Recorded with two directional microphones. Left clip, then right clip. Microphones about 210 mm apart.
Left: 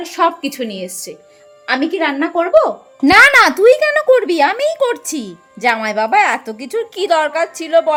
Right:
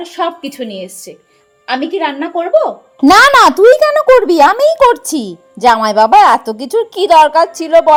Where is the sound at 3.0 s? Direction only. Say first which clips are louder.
Right 3 dB; 15° right (ahead or behind).